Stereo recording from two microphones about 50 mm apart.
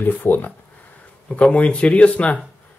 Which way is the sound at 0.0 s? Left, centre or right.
Left.